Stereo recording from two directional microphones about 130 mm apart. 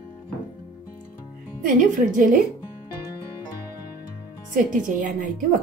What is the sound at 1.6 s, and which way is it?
Speech, 90° right.